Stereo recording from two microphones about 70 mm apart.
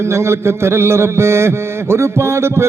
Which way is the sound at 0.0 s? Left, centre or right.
Right.